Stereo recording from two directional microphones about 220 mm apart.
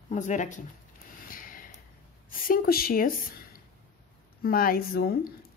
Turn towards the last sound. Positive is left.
turn(degrees=40)  # may be behind; listen again after turning